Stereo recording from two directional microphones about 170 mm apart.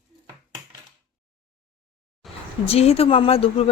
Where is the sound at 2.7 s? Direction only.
35° left (ahead or behind).